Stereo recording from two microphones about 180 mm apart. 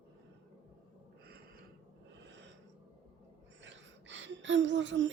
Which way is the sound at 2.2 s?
75° right (ahead or behind).